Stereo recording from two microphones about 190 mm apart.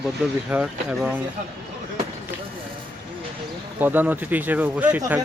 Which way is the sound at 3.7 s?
10° right (ahead or behind).